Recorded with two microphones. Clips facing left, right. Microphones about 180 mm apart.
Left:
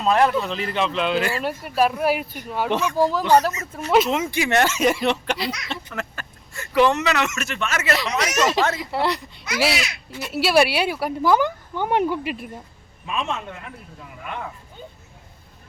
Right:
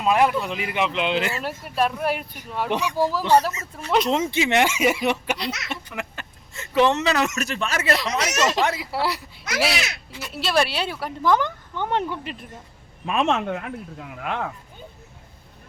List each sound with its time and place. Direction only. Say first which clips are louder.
0.0 s speech: left 1 dB; 10° right (ahead or behind)
1.4 s speech: left 3 dB; centre (ahead or behind)
2.6 s speech: left 2 dB; 15° right (ahead or behind)
2.9 s speech: left 1 dB; centre (ahead or behind)
4.1 s speech: even; 25° right (ahead or behind); by 5.7 s 5° right (ahead or behind)
5.9 s speech: left 1 dB; 15° right (ahead or behind); by 7.9 s 35° right (ahead or behind)
7.9 s speech: left 1 dB; centre (ahead or behind)
13.1 s speech: right 6 dB; 70° right (ahead or behind)